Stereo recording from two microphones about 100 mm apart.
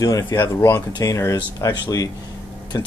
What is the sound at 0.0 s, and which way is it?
Speech, 40° left (ahead or behind).